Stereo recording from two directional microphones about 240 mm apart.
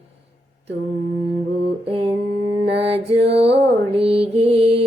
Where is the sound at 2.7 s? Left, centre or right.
Right.